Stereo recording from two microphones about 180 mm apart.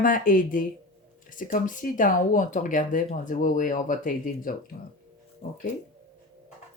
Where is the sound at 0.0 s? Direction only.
50° left (ahead or behind).